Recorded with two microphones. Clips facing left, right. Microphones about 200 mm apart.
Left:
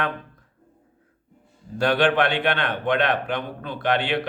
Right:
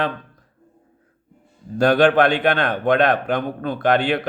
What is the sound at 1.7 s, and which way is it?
A man's voice, 40° right (ahead or behind).